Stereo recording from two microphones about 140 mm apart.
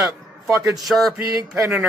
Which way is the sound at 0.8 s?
Centre (ahead or behind).